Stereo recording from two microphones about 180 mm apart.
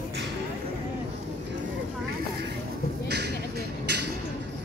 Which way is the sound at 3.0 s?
70° right (ahead or behind).